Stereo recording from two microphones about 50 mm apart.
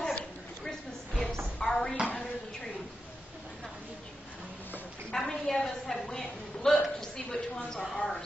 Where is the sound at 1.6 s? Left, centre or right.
Centre.